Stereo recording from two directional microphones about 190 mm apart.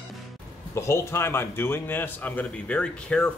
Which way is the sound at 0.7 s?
15° left (ahead or behind).